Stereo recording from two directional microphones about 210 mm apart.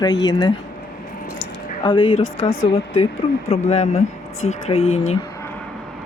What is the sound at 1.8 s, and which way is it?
Speech, 25° left (ahead or behind).